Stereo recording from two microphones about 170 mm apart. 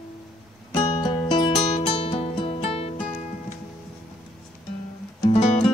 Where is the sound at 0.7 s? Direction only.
25° left (ahead or behind).